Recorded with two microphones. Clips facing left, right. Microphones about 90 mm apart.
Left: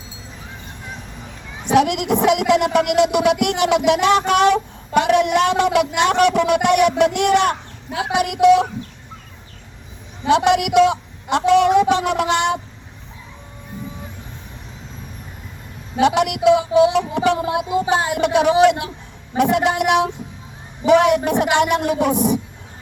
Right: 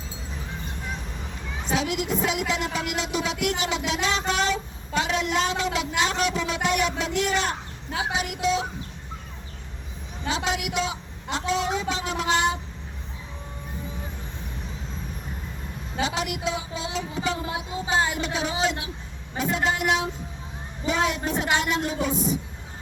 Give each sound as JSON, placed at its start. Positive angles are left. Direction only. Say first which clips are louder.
{"t": 1.6, "sound": "a man's voice", "louder": "left 10 dB", "side_deg": 65}
{"t": 10.2, "sound": "a man's voice", "louder": "left 12 dB", "side_deg": 70}
{"t": 16.0, "sound": "a man's voice", "louder": "left 11 dB", "side_deg": 65}